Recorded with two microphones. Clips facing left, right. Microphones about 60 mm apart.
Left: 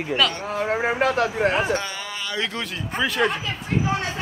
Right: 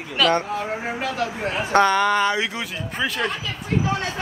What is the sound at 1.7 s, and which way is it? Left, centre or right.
Speech, right.